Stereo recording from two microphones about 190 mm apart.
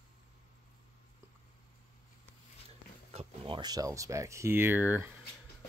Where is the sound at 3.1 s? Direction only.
30° right (ahead or behind).